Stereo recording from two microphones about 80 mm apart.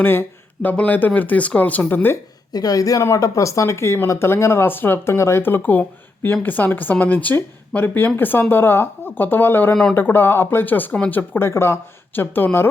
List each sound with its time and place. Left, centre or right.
0.0 s speech: left
2.5 s speech: left